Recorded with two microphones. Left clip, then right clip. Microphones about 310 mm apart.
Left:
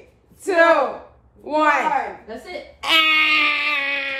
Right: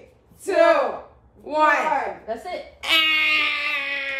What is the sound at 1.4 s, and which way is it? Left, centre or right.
Speech, centre.